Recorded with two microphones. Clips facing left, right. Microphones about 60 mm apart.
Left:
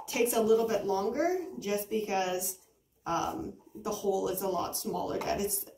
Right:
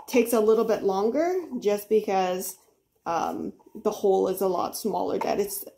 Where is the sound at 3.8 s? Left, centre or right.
Right.